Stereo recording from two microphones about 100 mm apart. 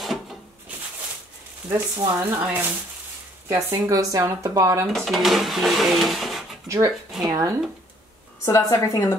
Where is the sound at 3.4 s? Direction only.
35° right (ahead or behind).